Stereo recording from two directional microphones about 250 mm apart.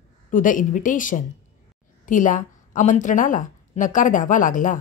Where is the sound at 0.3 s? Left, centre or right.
Left.